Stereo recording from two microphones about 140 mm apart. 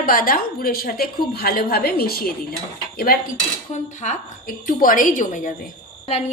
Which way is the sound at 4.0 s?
70° left (ahead or behind).